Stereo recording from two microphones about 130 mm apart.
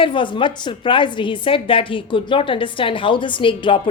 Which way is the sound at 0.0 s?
40° left (ahead or behind).